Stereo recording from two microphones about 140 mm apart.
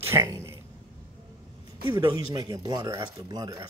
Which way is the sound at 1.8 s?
35° right (ahead or behind).